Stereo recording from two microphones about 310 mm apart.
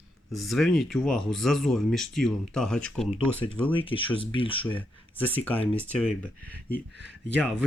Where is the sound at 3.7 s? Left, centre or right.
Centre.